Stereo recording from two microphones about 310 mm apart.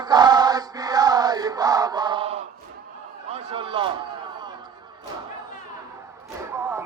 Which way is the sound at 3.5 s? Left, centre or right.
Centre.